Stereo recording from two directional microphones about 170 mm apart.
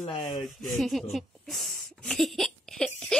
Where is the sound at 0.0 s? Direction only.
30° left (ahead or behind).